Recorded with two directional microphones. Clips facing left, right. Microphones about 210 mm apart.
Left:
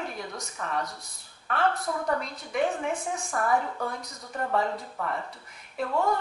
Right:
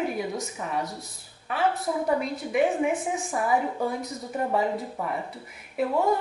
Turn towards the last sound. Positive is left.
turn(degrees=-15)  # may be behind; listen again after turning